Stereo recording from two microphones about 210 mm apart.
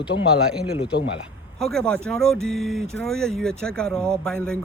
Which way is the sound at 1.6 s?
5° left (ahead or behind).